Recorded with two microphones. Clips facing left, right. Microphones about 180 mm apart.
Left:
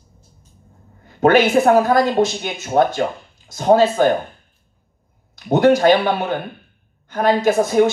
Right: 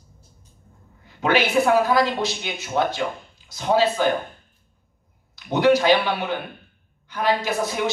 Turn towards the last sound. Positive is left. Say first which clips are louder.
# left 10 dB
turn(degrees=50)  # may be behind; listen again after turning